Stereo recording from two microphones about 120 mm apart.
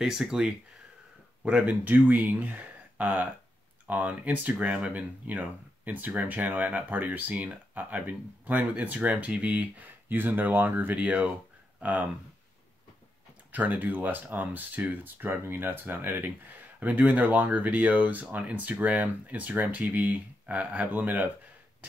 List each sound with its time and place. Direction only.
0.0 s speech: 5° right (ahead or behind)
13.5 s speech: 15° right (ahead or behind)